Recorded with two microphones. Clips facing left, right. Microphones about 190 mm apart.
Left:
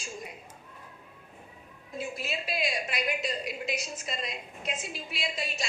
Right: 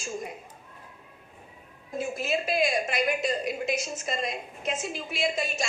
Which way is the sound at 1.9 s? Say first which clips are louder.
Right 6 dB; 45° right (ahead or behind).